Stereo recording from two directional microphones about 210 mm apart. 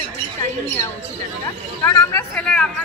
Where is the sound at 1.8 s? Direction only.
10° left (ahead or behind).